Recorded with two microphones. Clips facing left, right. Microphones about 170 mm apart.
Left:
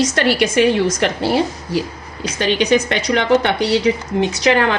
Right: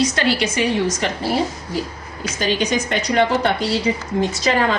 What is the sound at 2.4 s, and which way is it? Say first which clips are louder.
A woman's voice: left 5 dB; 70° left (ahead or behind).